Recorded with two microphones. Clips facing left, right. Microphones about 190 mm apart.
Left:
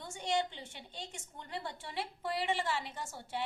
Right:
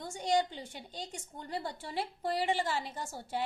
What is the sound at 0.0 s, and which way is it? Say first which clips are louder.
A woman's voice: right 4 dB; 40° right (ahead or behind).